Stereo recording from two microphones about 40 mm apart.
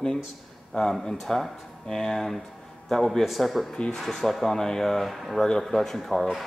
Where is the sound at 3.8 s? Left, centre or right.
Centre.